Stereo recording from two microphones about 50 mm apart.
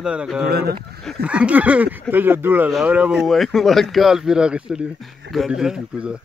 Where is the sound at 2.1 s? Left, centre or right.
Right.